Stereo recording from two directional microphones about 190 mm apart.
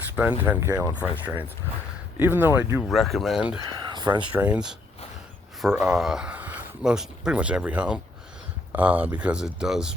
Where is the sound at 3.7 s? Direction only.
25° right (ahead or behind).